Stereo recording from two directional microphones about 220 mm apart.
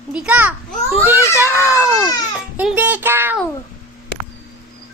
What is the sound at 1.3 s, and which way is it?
Child singing, 10° right (ahead or behind).